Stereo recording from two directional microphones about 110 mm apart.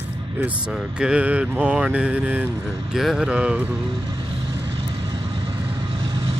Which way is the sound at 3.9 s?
50° right (ahead or behind).